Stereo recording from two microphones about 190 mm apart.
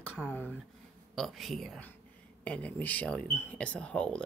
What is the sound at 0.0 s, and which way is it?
Speech, 10° left (ahead or behind).